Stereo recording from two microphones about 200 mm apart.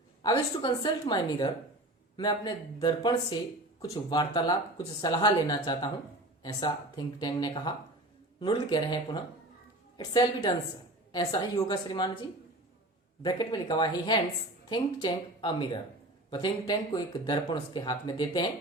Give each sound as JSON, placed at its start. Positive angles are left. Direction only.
{"t": 0.2, "sound": "speech", "side_deg": 20}
{"t": 13.2, "sound": "speech", "side_deg": 20}